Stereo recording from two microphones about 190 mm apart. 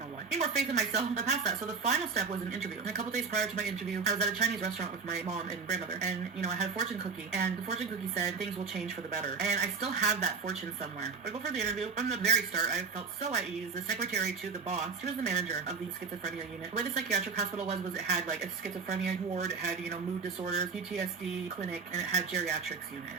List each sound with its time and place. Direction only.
0.3 s speech: 35° right (ahead or behind)
14.0 s speech: 35° right (ahead or behind)
16.7 s speech: 35° right (ahead or behind)